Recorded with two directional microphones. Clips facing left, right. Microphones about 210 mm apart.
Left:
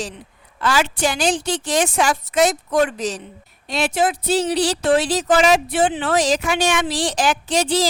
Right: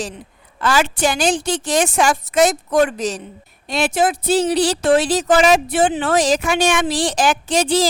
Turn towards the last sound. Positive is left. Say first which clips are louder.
# right 2 dB
turn(degrees=-50)  # may be behind; listen again after turning